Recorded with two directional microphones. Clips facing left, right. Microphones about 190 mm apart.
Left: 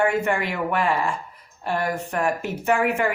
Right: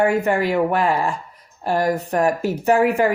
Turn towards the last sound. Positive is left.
turn(degrees=-35)  # may be behind; listen again after turning